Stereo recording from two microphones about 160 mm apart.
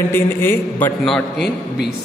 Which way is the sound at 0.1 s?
15° left (ahead or behind).